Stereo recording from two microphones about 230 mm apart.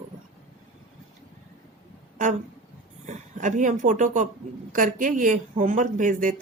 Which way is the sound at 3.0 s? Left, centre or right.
Right.